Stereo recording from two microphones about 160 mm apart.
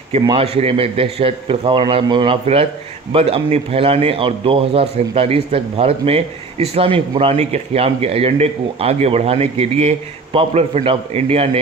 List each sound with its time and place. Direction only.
0.4 s a man's voice: 40° right (ahead or behind)